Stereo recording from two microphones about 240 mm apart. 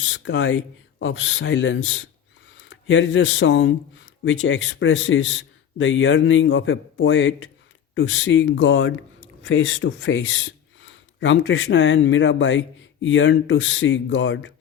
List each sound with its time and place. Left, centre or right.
0.0 s speech: left